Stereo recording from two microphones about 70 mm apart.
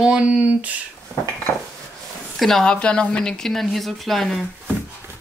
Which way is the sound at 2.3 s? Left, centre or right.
Centre.